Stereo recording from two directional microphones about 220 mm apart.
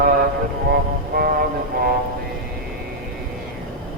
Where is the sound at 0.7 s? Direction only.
45° right (ahead or behind).